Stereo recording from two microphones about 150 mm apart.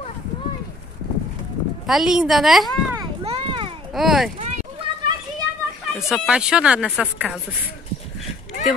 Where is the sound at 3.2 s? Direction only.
45° right (ahead or behind).